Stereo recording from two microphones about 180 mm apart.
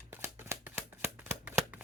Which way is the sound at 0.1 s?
15° right (ahead or behind).